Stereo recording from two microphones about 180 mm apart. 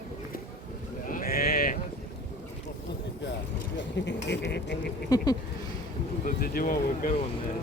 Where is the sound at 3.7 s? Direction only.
75° left (ahead or behind).